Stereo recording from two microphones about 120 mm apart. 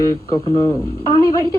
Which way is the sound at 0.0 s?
30° left (ahead or behind).